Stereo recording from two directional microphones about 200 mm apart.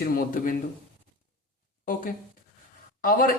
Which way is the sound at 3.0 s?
45° left (ahead or behind).